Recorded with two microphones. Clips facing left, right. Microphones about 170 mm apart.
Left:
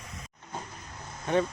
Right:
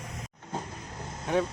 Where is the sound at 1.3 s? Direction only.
10° right (ahead or behind).